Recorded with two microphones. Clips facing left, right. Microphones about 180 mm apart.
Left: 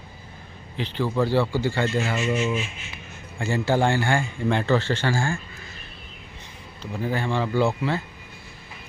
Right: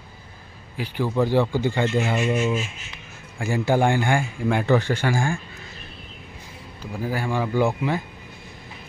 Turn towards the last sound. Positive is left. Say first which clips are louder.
# right 1 dB
turn(degrees=-15)  # may be behind; listen again after turning